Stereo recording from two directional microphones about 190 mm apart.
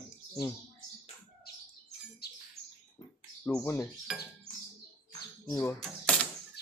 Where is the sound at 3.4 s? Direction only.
10° left (ahead or behind).